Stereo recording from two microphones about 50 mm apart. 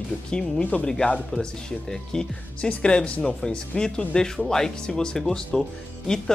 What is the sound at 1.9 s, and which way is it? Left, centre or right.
Speech, centre.